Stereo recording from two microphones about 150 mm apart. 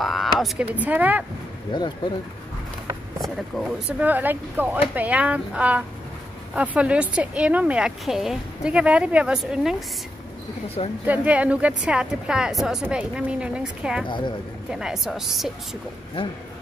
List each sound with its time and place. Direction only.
0.0 s a sound: centre (ahead or behind)
0.7 s a woman's voice: 10° right (ahead or behind)
1.7 s speech: 30° left (ahead or behind)
3.2 s a woman's voice: centre (ahead or behind)
4.0 s a woman's voice: 10° right (ahead or behind)
11.1 s a woman's voice: 10° right (ahead or behind)
14.0 s speech: 30° left (ahead or behind)
14.7 s a woman's voice: 5° right (ahead or behind)